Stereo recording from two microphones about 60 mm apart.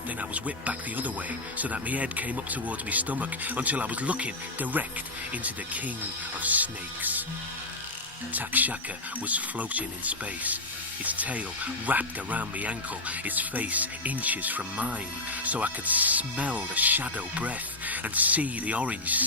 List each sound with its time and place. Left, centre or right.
0.2 s speech: right
8.3 s speech: right